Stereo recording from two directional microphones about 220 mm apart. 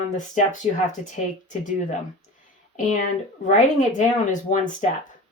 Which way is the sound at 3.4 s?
35° left (ahead or behind).